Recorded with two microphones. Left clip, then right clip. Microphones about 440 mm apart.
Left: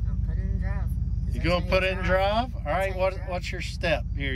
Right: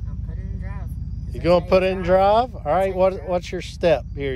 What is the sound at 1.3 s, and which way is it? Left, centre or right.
Speech, centre.